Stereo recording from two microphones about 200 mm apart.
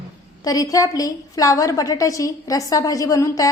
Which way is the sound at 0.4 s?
15° left (ahead or behind).